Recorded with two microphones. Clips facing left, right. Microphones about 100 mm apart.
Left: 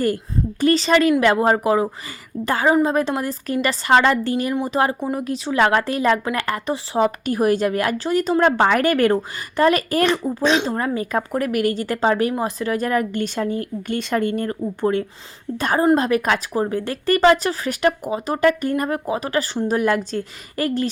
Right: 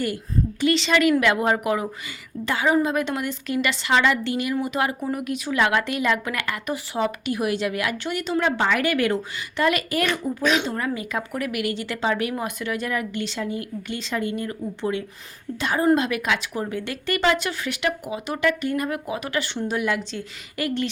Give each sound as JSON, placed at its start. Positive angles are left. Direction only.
{"t": 0.6, "sound": "a woman's voice", "side_deg": 40}